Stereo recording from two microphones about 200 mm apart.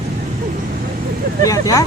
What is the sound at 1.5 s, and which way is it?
Speech, 15° left (ahead or behind).